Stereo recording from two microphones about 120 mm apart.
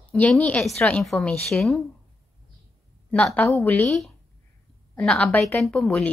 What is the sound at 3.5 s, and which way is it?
Speech, 15° left (ahead or behind).